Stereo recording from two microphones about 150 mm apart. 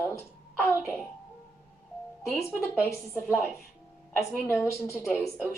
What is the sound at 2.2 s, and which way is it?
A woman's voice, 15° left (ahead or behind).